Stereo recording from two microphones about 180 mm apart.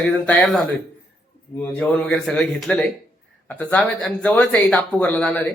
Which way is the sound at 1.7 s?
5° left (ahead or behind).